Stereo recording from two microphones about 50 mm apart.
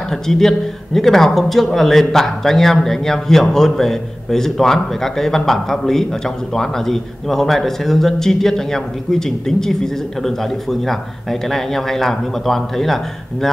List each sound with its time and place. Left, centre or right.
0.1 s speech: centre